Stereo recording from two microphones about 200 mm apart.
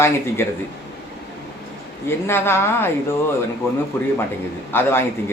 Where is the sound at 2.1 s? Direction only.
10° left (ahead or behind).